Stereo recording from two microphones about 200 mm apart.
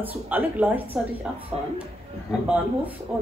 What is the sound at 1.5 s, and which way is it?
Speech, 30° right (ahead or behind).